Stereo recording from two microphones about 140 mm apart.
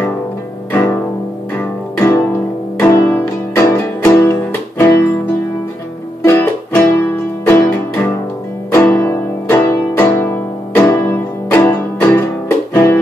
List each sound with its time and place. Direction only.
1.6 s music: 15° left (ahead or behind)
6.2 s music: 20° left (ahead or behind)